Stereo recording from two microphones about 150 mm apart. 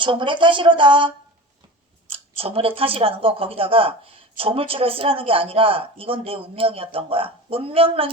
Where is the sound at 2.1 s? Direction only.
40° right (ahead or behind).